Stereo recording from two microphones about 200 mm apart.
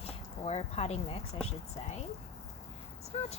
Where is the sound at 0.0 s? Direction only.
30° left (ahead or behind).